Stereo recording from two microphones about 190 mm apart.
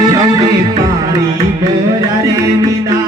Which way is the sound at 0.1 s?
20° right (ahead or behind).